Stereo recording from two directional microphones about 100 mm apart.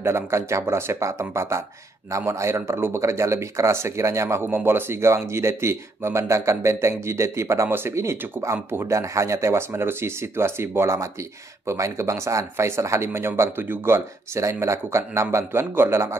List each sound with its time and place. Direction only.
0.0 s speech: 25° right (ahead or behind)